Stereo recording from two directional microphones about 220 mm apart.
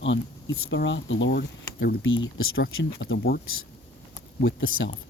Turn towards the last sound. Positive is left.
turn(degrees=65)  # may be behind; listen again after turning